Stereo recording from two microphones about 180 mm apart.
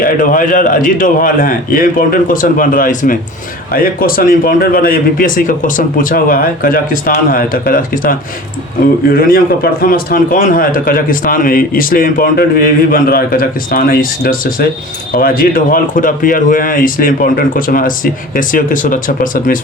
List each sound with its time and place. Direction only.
0.0 s speech: 50° left (ahead or behind)